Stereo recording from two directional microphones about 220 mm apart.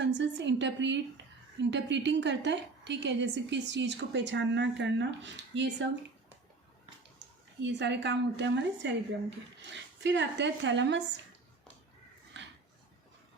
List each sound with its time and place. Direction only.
0.0 s a woman's voice: 50° right (ahead or behind)
7.6 s a woman's voice: 55° right (ahead or behind)